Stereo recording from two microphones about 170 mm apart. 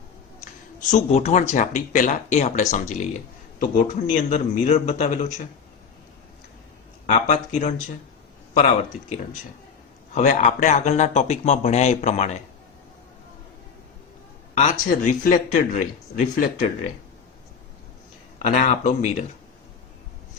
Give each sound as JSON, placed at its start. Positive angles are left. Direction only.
{"t": 0.8, "sound": "a man's voice", "side_deg": 45}
{"t": 7.1, "sound": "speech", "side_deg": 40}
{"t": 10.2, "sound": "speech", "side_deg": 45}
{"t": 14.5, "sound": "a man's voice", "side_deg": 45}
{"t": 18.4, "sound": "a man's voice", "side_deg": 45}